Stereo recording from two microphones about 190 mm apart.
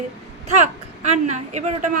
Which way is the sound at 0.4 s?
35° right (ahead or behind).